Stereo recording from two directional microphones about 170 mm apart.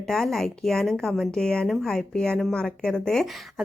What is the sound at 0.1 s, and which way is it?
Speech, centre (ahead or behind).